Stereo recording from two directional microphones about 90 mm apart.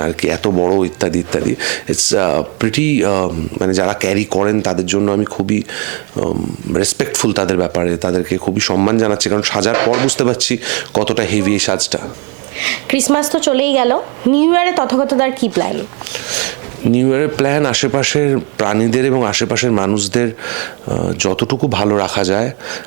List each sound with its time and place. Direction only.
0.0 s speech: 20° right (ahead or behind)
6.8 s speech: 15° right (ahead or behind)
21.2 s speech: 15° right (ahead or behind)